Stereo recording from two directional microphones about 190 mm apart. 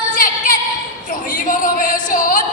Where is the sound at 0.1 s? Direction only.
45° left (ahead or behind).